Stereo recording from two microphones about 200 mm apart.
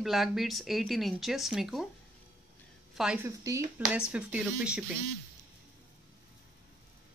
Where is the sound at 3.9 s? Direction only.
5° right (ahead or behind).